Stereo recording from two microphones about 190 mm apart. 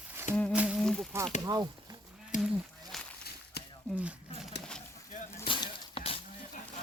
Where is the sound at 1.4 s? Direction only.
20° right (ahead or behind).